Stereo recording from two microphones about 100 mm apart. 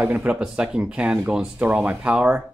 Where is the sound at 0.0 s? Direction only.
20° right (ahead or behind).